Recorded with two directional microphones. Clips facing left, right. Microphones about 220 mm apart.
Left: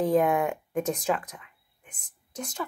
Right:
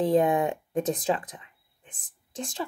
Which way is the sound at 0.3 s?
30° right (ahead or behind).